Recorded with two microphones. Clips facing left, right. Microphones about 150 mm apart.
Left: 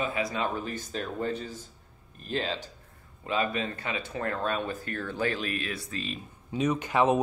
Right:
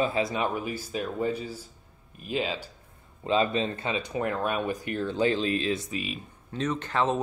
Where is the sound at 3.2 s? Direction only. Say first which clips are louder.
Right 4 dB; 25° right (ahead or behind).